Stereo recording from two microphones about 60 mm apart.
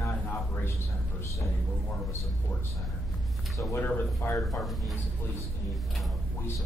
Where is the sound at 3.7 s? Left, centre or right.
Left.